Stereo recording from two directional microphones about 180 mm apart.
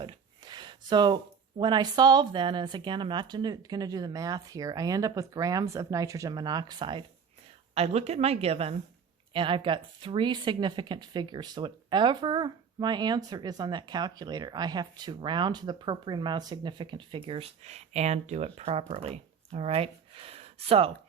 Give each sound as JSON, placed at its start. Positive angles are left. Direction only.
{"t": 0.0, "sound": "a woman's voice", "side_deg": -25}